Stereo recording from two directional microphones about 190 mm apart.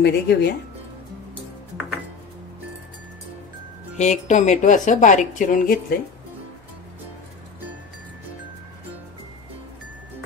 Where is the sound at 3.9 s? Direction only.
35° left (ahead or behind).